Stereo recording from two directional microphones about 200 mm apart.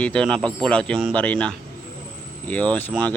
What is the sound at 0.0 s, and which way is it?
Speech, 5° left (ahead or behind).